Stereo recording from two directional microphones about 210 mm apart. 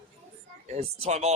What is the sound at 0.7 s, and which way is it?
Speech, 30° right (ahead or behind).